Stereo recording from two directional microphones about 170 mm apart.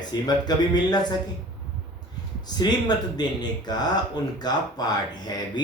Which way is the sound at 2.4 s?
25° left (ahead or behind).